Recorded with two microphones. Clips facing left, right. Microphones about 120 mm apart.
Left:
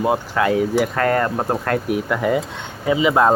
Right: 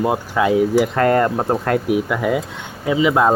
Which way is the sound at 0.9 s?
20° right (ahead or behind).